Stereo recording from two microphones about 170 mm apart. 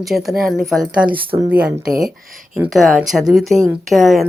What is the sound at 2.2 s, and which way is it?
Speech, 55° right (ahead or behind).